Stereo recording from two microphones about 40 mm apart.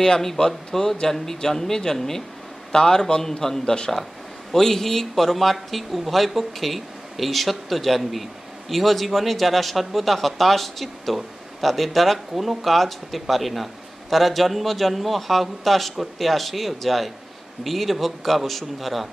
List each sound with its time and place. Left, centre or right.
0.0 s speech: centre
4.5 s speech: centre